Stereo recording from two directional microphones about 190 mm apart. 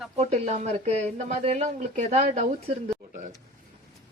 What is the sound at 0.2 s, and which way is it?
Speech, 35° right (ahead or behind).